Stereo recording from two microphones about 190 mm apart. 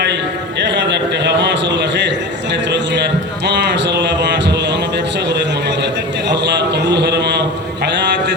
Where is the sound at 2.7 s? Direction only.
65° right (ahead or behind).